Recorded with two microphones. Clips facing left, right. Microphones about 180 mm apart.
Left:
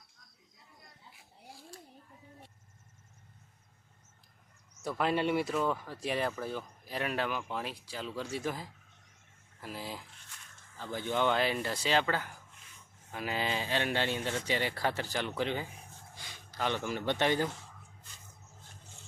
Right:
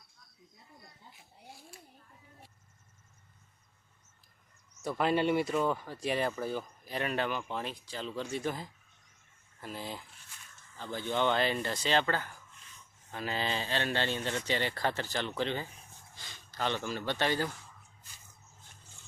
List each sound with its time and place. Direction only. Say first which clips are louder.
4.8 s speech: right 2 dB; centre (ahead or behind); by 17.6 s 20° left (ahead or behind)